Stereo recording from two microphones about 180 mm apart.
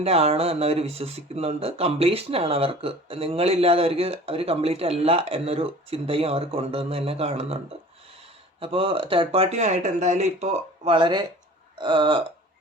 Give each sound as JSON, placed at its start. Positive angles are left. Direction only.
{"t": 0.0, "sound": "speech", "side_deg": -35}
{"t": 8.6, "sound": "speech", "side_deg": -30}